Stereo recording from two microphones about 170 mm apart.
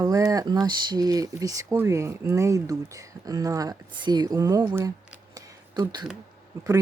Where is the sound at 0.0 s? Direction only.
20° right (ahead or behind).